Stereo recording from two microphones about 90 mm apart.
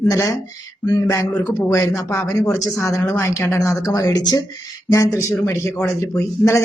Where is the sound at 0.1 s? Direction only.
40° left (ahead or behind).